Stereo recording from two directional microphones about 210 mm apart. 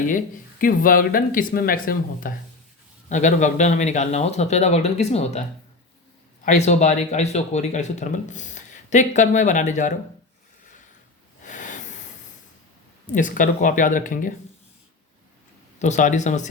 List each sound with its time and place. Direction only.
0.6 s speech: 40° left (ahead or behind)
6.4 s speech: 35° left (ahead or behind)
11.4 s hiss: 35° left (ahead or behind)
13.1 s speech: 40° left (ahead or behind)
15.8 s speech: 35° left (ahead or behind)